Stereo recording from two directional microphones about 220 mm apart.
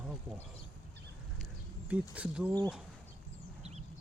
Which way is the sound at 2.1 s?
5° right (ahead or behind).